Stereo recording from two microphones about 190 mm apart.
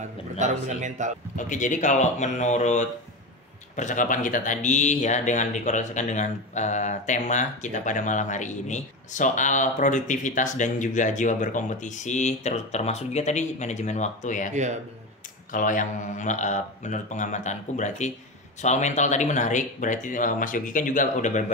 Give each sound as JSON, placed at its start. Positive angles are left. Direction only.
{"t": 0.4, "sound": "a man's voice", "side_deg": -40}
{"t": 1.3, "sound": "speech", "side_deg": 40}
{"t": 15.5, "sound": "speech", "side_deg": 45}